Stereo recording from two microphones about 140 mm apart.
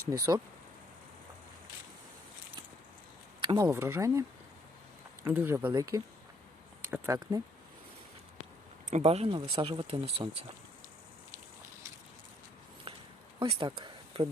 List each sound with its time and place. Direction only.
0.1 s speech: 25° right (ahead or behind)
3.4 s speech: 30° right (ahead or behind)
5.7 s speech: 25° right (ahead or behind)
8.9 s speech: 50° right (ahead or behind)
12.9 s a sound: 40° right (ahead or behind)
13.4 s speech: 40° right (ahead or behind)